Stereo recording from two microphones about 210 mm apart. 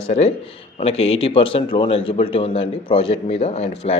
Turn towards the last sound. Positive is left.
turn(degrees=30)  # may be behind; listen again after turning